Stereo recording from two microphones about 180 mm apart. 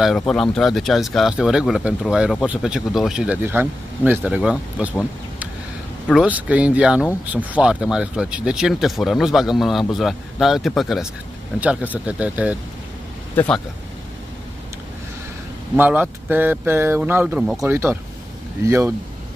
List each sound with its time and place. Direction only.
0.3 s speech: centre (ahead or behind)
6.0 s speech: 5° right (ahead or behind)
15.7 s speech: 10° right (ahead or behind)
17.6 s speech: 15° right (ahead or behind)